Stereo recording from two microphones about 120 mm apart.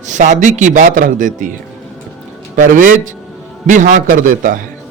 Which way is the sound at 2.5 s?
90° right.